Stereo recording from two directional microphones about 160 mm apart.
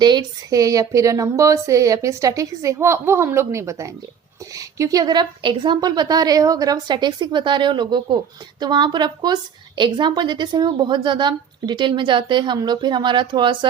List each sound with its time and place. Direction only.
0.0 s a woman's voice: 25° right (ahead or behind)